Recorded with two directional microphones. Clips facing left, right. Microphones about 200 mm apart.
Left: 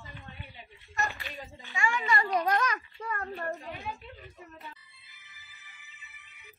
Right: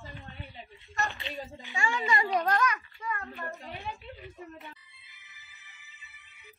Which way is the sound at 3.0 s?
45° left (ahead or behind).